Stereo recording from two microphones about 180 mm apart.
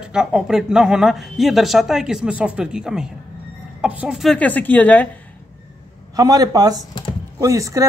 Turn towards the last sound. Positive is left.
turn(degrees=-15)  # may be behind; listen again after turning